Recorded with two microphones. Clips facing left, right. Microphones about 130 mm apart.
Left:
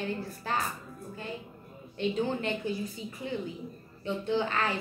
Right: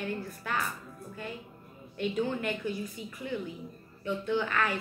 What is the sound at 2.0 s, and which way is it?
A woman's voice, 30° left (ahead or behind).